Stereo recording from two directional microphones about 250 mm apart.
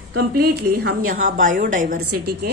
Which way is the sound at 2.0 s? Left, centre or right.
Right.